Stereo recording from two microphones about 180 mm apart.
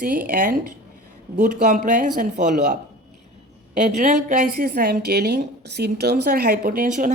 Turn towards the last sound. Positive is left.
turn(degrees=-45)  # may be behind; listen again after turning